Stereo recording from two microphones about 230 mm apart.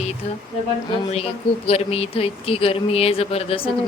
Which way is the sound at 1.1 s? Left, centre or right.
Left.